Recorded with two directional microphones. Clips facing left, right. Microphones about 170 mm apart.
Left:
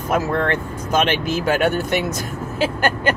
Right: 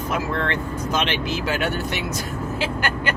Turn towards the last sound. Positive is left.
turn(degrees=45)  # may be behind; listen again after turning